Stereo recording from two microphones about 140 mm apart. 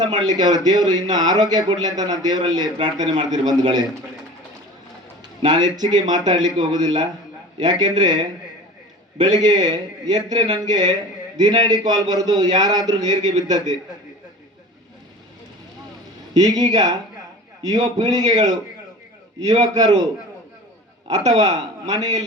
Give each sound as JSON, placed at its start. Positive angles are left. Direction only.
{"t": 0.2, "sound": "a man's voice", "side_deg": -30}
{"t": 5.5, "sound": "a man's voice", "side_deg": -30}
{"t": 16.3, "sound": "a man's voice", "side_deg": -30}
{"t": 21.3, "sound": "a man's voice", "side_deg": -30}